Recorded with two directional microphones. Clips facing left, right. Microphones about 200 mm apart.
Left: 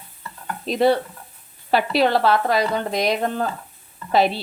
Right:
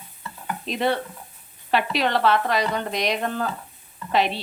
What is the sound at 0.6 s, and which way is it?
Speech, 35° left (ahead or behind).